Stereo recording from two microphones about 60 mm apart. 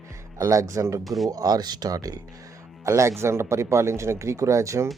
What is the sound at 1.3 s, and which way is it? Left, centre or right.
Speech, right.